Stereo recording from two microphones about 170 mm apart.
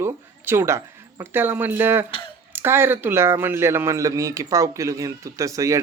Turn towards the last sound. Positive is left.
turn(degrees=-20)  # may be behind; listen again after turning